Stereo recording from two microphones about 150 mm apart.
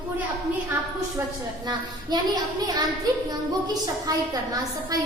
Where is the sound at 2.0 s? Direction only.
25° right (ahead or behind).